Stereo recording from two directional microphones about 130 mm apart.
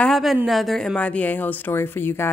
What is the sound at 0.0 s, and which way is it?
A woman's voice, centre (ahead or behind).